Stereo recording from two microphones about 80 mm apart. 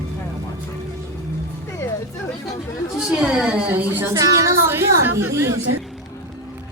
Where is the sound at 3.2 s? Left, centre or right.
Centre.